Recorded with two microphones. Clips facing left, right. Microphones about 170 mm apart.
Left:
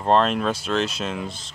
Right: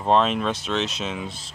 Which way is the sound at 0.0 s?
Centre (ahead or behind).